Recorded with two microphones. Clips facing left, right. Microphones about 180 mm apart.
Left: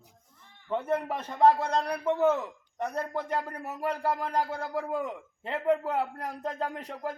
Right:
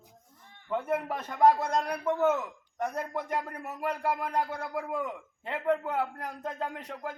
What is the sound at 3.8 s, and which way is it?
Speech, centre (ahead or behind).